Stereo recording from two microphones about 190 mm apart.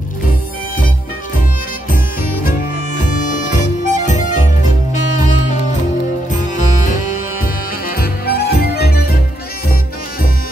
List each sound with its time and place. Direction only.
3.3 s music: 40° left (ahead or behind)
8.0 s music: 55° left (ahead or behind)